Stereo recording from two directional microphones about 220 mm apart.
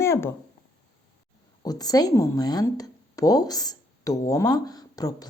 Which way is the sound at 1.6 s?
15° left (ahead or behind).